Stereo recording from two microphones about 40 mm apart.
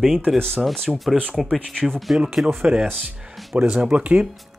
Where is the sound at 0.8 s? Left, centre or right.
Centre.